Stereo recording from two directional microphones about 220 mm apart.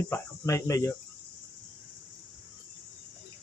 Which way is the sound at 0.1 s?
15° left (ahead or behind).